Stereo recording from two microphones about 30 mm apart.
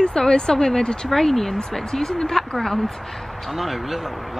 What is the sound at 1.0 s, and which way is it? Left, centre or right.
Speech, centre.